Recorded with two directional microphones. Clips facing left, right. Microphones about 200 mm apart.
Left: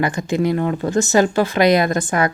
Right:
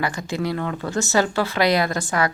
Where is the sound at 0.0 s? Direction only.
20° left (ahead or behind).